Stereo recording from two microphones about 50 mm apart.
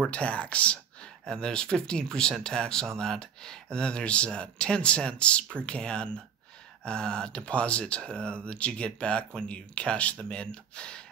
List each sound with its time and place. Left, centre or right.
0.0 s speech: left